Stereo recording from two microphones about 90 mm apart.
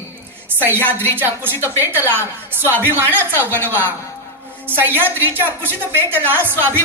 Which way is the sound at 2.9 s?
25° right (ahead or behind).